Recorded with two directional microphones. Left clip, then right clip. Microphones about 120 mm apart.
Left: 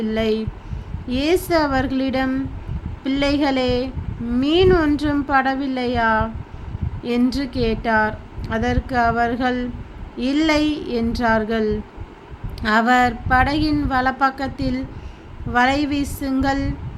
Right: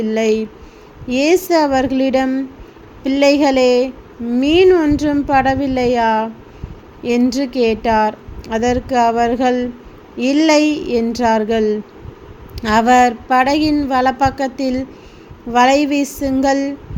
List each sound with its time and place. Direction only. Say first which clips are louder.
0.0 s a woman's voice: right 5 dB; 20° right (ahead or behind)